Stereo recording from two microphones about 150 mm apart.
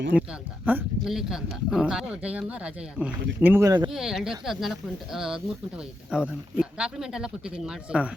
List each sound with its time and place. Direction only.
0.1 s speech: 10° right (ahead or behind)
3.6 s speech: 25° right (ahead or behind)
3.8 s speech: 5° right (ahead or behind)